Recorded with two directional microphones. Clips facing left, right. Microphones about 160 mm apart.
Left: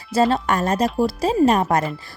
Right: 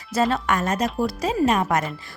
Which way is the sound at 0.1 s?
30° left (ahead or behind).